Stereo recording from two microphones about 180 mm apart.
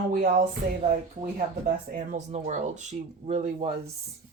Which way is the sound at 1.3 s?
45° right (ahead or behind).